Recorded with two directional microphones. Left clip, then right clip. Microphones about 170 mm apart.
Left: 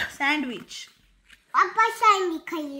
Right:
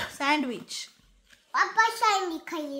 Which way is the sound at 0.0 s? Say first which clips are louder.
Left 2 dB; 15° right (ahead or behind).